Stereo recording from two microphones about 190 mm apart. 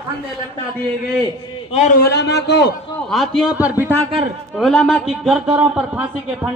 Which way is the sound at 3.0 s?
Centre (ahead or behind).